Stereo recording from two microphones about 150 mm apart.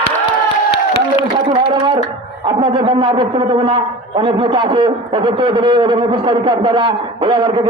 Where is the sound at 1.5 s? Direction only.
40° right (ahead or behind).